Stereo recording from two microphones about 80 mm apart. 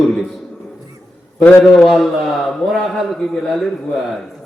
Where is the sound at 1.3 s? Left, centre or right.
Left.